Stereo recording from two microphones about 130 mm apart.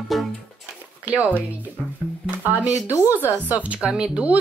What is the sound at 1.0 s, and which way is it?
Speech, 10° right (ahead or behind).